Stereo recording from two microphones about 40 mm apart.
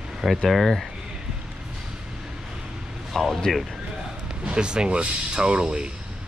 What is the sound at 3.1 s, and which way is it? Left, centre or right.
Speech, centre.